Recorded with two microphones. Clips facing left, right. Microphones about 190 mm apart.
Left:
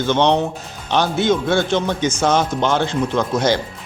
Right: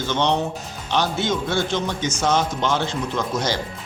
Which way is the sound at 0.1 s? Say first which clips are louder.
Left 5 dB; 60° left (ahead or behind).